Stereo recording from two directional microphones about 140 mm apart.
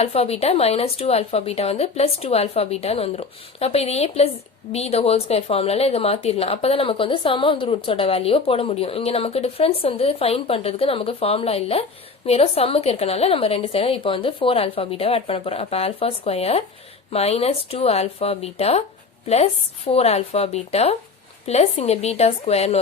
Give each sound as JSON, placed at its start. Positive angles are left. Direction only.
{"t": 0.0, "sound": "a woman's voice", "side_deg": 45}